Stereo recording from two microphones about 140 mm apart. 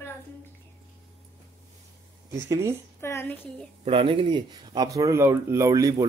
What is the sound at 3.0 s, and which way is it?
Speech, 20° left (ahead or behind).